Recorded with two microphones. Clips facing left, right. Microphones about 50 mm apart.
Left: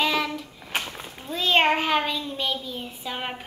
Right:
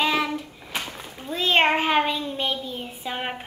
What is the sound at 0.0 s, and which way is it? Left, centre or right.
Child singing, centre.